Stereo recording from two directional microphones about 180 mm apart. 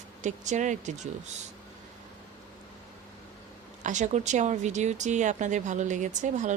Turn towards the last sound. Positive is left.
turn(degrees=-45)  # may be behind; listen again after turning